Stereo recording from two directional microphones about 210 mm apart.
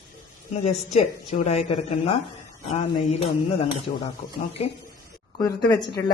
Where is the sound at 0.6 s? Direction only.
30° left (ahead or behind).